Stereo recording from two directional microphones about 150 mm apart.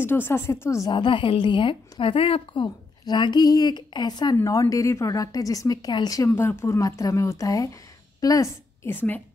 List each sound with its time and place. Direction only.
0.0 s speech: 15° left (ahead or behind)
0.9 s a woman's voice: 35° left (ahead or behind); by 9.2 s 10° left (ahead or behind)